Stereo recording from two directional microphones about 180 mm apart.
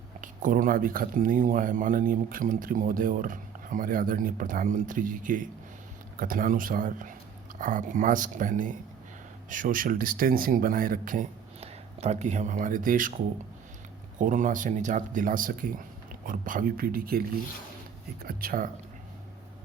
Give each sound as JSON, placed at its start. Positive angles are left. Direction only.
{"t": 0.2, "sound": "speech", "side_deg": -50}
{"t": 14.2, "sound": "speech", "side_deg": -45}